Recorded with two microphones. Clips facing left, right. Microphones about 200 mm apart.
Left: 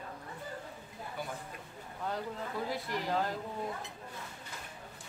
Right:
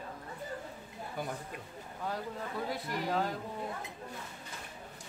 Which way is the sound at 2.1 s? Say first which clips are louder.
Left 1 dB; centre (ahead or behind).